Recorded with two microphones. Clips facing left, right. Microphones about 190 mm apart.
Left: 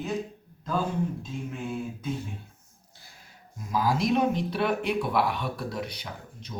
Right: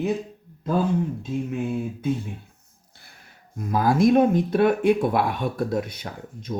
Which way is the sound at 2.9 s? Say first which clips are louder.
Right 1 dB; 60° right (ahead or behind).